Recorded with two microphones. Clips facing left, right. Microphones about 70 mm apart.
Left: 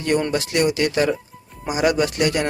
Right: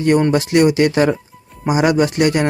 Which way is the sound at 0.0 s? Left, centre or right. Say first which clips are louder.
Right 6 dB; right.